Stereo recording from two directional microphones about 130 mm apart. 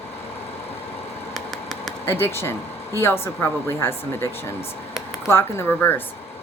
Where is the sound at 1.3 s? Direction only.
5° left (ahead or behind).